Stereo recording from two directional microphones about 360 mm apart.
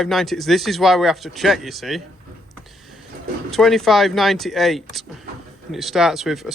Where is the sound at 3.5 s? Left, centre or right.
Centre.